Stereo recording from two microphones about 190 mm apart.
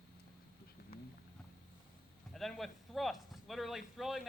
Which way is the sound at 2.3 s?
Centre (ahead or behind).